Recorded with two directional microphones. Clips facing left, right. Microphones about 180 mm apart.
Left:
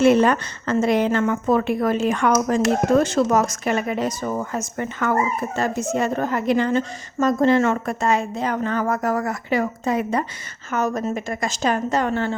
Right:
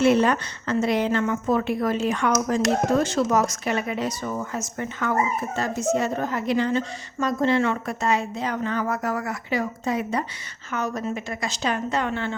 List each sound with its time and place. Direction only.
0.0 s speech: 50° left (ahead or behind)